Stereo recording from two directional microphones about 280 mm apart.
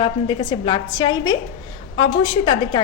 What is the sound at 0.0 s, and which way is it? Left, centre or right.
A woman's voice, centre.